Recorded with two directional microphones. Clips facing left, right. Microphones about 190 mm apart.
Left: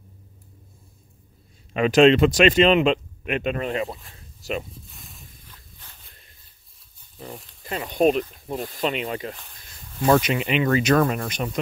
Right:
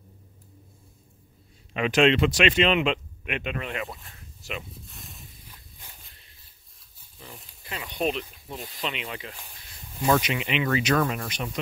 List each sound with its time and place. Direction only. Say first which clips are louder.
1.7 s speech: left 6 dB; 40° left (ahead or behind)
4.8 s a sound: right 1 dB; centre (ahead or behind)
7.6 s speech: left 8 dB; 45° left (ahead or behind)